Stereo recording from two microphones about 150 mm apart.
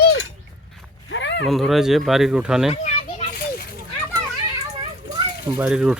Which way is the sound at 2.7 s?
45° left (ahead or behind).